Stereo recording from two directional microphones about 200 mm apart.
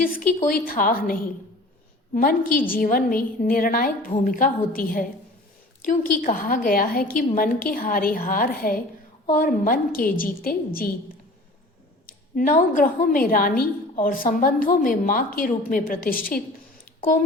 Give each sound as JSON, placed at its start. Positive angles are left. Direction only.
{"t": 0.0, "sound": "a woman's voice", "side_deg": 45}
{"t": 12.0, "sound": "a woman's voice", "side_deg": 45}